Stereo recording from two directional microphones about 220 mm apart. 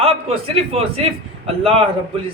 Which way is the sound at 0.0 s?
25° right (ahead or behind).